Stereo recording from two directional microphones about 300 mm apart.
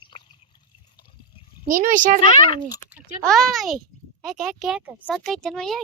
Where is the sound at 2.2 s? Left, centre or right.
Centre.